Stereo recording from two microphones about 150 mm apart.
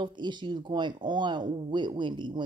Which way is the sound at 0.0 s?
30° right (ahead or behind).